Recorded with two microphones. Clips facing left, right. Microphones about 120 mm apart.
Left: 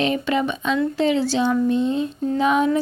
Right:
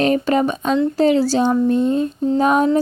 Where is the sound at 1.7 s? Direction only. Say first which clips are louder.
Right 4 dB; 45° right (ahead or behind).